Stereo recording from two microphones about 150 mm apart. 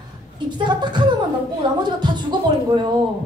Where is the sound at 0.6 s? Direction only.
30° right (ahead or behind).